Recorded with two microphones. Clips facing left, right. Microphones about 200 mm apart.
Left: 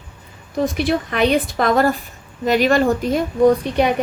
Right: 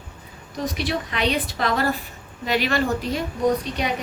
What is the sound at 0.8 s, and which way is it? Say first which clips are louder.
A woman's voice: left 7 dB; 50° left (ahead or behind).